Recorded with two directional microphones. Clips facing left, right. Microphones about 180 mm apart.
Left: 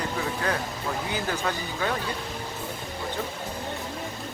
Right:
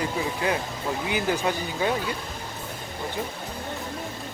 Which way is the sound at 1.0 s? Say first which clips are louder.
Right 5 dB; 15° right (ahead or behind).